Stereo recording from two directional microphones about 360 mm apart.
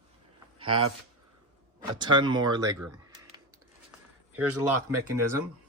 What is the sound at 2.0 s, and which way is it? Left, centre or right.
Speech, centre.